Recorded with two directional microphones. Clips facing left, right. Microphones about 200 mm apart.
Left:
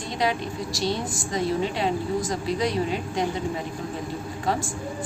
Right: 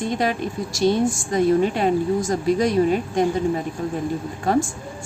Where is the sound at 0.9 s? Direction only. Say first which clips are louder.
Right 11 dB; 50° right (ahead or behind).